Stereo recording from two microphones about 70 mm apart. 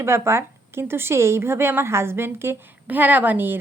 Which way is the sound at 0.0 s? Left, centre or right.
Right.